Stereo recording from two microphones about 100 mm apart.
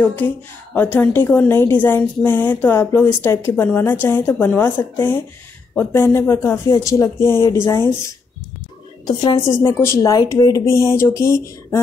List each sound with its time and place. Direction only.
0.7 s a woman's voice: 15° left (ahead or behind)
9.0 s a woman's voice: 40° left (ahead or behind)
9.5 s a woman's voice: 25° left (ahead or behind)
10.1 s a woman's voice: 40° left (ahead or behind)